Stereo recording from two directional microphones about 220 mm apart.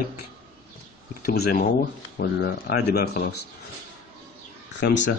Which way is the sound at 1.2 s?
45° left (ahead or behind).